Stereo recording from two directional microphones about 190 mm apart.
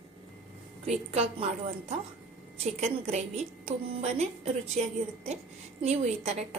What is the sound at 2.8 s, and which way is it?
A woman's voice, 35° right (ahead or behind).